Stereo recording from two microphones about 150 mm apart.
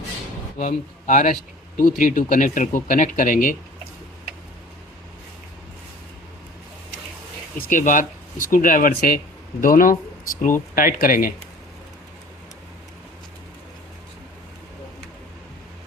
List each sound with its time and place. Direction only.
0.6 s speech: 55° left (ahead or behind)
1.7 s speech: 70° left (ahead or behind)
7.7 s speech: 60° left (ahead or behind)